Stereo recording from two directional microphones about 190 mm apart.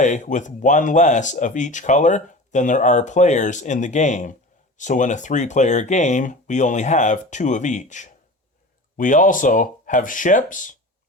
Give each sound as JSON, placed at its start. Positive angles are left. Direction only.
{"t": 0.0, "sound": "speech", "side_deg": 40}